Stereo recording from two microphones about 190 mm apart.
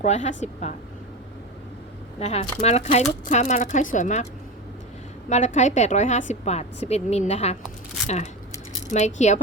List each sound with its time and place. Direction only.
0.0 s a woman's voice: 35° left (ahead or behind)
2.1 s a woman's voice: 35° left (ahead or behind)
5.3 s a woman's voice: 40° left (ahead or behind)